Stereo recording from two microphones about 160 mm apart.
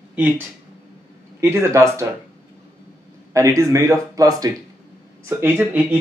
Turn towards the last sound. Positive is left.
turn(degrees=-10)  # may be behind; listen again after turning